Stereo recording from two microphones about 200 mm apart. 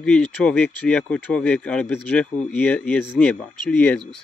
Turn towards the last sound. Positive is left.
turn(degrees=5)  # may be behind; listen again after turning